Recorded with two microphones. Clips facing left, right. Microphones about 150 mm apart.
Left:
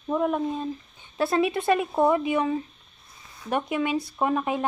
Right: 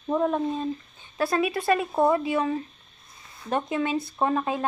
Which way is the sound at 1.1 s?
25° left (ahead or behind).